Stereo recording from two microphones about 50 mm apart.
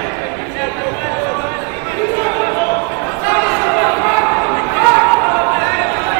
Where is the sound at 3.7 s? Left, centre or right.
Centre.